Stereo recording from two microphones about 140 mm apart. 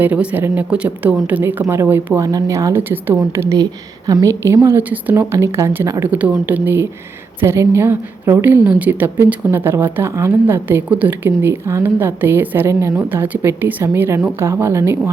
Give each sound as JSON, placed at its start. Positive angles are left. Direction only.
{"t": 0.0, "sound": "a woman's voice", "side_deg": -10}